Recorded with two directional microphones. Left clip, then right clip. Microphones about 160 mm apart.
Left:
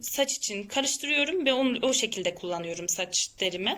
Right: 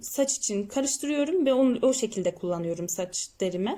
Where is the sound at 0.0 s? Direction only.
40° right (ahead or behind).